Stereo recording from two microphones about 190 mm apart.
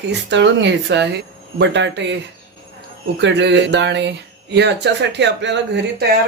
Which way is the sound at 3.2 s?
70° right (ahead or behind).